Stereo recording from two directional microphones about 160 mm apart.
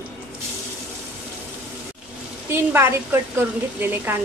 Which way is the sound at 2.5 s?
15° right (ahead or behind).